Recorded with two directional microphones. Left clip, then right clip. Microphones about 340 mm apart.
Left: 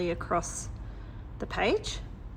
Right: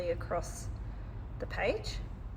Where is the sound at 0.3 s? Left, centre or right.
Left.